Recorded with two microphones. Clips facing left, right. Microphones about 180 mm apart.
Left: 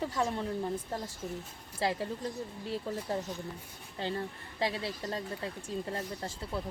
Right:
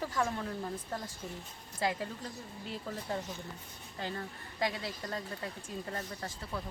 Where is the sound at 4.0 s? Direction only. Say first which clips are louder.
Left 4 dB; 30° left (ahead or behind).